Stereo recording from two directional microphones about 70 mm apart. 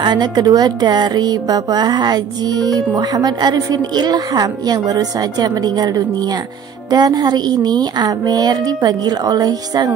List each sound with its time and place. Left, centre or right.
0.0 s speech: right